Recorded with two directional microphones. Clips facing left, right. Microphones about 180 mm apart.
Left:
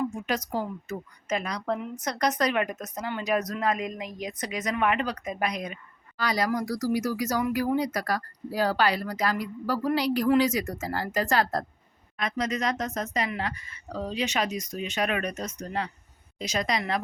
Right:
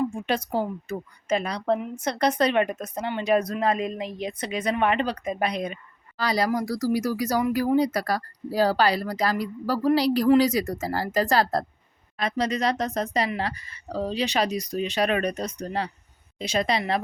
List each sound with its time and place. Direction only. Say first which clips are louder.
0.0 s a woman's voice: right 3 dB; 30° right (ahead or behind)